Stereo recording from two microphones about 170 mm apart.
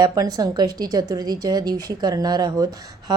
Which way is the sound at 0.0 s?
20° right (ahead or behind).